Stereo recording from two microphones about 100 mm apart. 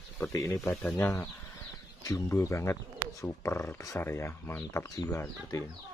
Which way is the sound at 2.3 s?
25° left (ahead or behind).